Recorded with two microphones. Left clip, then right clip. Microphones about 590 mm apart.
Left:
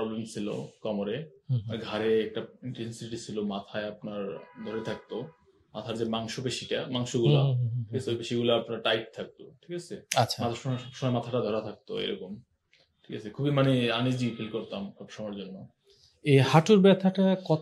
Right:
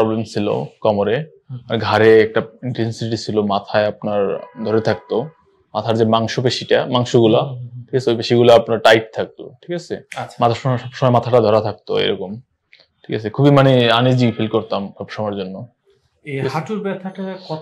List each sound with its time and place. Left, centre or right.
0.3 s speech: right
16.3 s speech: left